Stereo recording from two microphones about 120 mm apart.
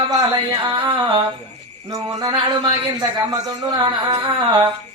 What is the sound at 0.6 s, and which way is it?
Music, 40° right (ahead or behind).